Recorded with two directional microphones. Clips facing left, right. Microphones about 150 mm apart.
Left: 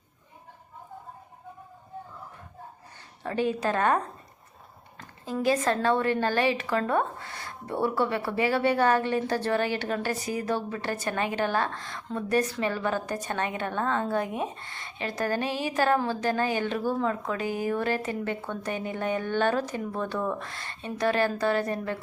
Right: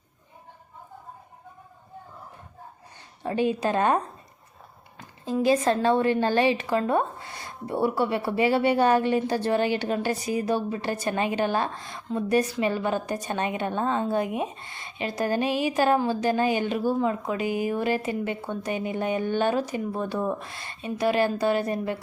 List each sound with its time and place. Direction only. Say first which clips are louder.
3.2 s a woman's voice: right 2 dB; 20° right (ahead or behind)
5.2 s a woman's voice: right 3 dB; 20° right (ahead or behind)